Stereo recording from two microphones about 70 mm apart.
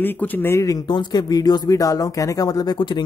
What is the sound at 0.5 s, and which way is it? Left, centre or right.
Speech, left.